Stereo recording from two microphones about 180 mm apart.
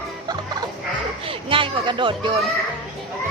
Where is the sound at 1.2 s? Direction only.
30° right (ahead or behind).